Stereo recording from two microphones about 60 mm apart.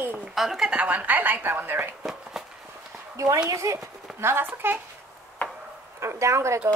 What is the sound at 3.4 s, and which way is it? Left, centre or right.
Speech, right.